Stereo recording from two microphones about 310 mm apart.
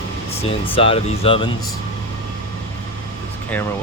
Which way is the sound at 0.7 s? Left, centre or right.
Centre.